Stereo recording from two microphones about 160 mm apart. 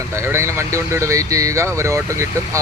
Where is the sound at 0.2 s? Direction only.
15° right (ahead or behind).